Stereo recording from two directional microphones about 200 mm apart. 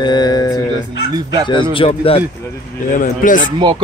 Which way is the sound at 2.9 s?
40° left (ahead or behind).